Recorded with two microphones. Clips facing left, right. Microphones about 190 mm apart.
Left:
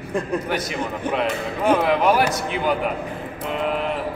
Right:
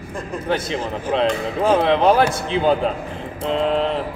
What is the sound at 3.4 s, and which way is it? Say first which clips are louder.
Mantra: right 5 dB; 25° right (ahead or behind).